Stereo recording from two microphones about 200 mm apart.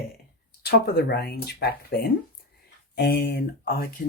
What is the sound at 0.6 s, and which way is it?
Speech, 55° left (ahead or behind).